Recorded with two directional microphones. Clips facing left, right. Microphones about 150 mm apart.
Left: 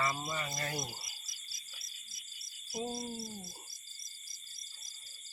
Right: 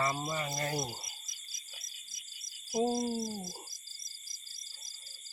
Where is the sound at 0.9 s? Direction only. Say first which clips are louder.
Right 4 dB; 20° right (ahead or behind).